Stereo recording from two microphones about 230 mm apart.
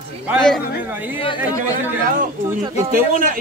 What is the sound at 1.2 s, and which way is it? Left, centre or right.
Speech, centre.